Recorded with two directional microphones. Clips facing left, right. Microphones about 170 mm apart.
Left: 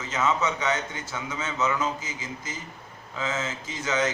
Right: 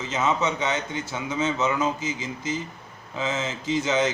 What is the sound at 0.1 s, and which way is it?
Mantra, 25° right (ahead or behind).